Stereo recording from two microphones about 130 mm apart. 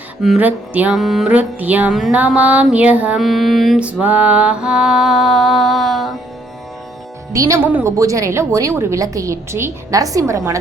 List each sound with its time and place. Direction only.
0.2 s music: 10° right (ahead or behind)
0.9 s music: centre (ahead or behind)
3.2 s music: centre (ahead or behind)
7.3 s a woman's voice: 25° right (ahead or behind)